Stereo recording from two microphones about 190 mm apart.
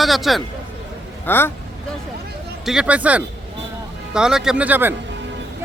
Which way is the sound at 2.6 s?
5° right (ahead or behind).